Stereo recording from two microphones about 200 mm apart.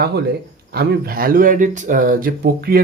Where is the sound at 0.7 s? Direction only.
55° right (ahead or behind).